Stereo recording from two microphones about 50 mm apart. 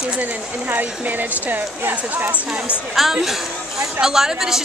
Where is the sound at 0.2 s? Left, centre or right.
Right.